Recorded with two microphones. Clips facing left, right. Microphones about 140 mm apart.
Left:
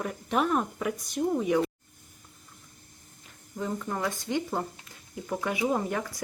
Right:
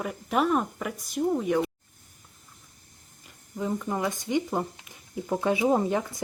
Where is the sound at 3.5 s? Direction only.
10° right (ahead or behind).